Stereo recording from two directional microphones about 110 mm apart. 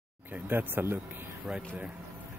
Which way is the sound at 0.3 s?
20° right (ahead or behind).